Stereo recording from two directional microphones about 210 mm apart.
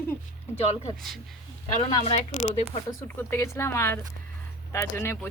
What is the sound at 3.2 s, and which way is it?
Speech, 10° left (ahead or behind).